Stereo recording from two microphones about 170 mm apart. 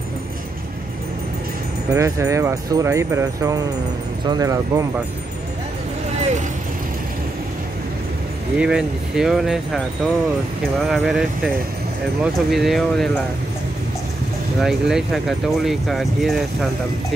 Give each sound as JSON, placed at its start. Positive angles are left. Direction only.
{"t": 1.9, "sound": "speech", "side_deg": -20}
{"t": 8.5, "sound": "speech", "side_deg": -5}
{"t": 14.6, "sound": "speech", "side_deg": 0}